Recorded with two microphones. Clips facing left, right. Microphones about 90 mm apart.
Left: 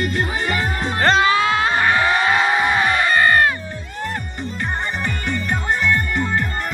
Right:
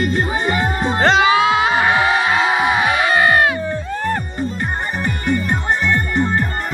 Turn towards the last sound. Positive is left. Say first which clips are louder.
# right 3 dB
turn(degrees=-30)  # may be behind; listen again after turning